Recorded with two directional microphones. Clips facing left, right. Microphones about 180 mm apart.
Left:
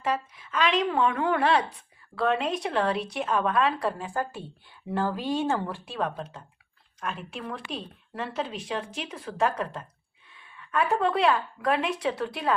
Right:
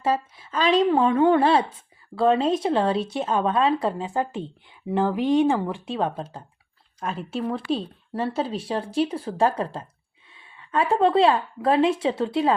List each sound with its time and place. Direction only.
0.0 s a woman's voice: 30° right (ahead or behind)